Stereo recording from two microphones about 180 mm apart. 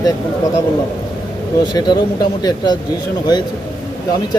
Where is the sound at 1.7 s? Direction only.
25° left (ahead or behind).